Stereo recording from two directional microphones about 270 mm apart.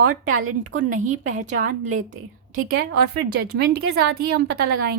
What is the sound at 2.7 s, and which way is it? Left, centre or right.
A woman's voice, right.